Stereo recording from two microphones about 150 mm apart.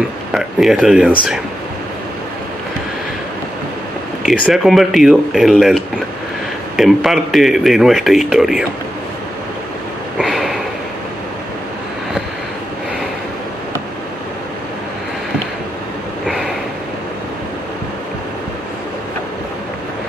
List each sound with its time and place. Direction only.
0.3 s speech: 5° right (ahead or behind)
4.3 s a man's voice: centre (ahead or behind)
10.1 s sniff: centre (ahead or behind)
16.3 s snort: centre (ahead or behind)